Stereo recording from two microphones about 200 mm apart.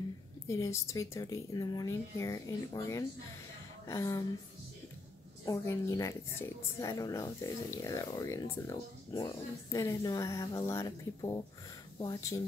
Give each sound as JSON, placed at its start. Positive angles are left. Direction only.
{"t": 0.5, "sound": "a woman's voice", "side_deg": 15}
{"t": 5.4, "sound": "a woman's voice", "side_deg": 15}